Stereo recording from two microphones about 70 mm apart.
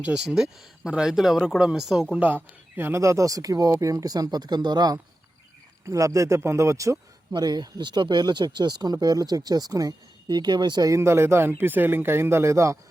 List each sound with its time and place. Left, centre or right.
0.3 s speech: centre
2.1 s speech: right
3.0 s speech: right
5.8 s speech: right
7.3 s speech: right
10.9 s speech: right